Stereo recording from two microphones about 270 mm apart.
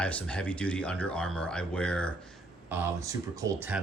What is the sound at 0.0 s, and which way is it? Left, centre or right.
Speech, centre.